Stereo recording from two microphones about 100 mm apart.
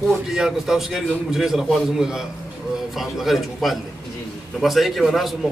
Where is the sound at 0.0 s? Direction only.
Centre (ahead or behind).